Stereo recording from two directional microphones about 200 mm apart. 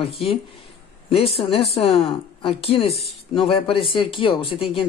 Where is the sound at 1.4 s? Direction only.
30° left (ahead or behind).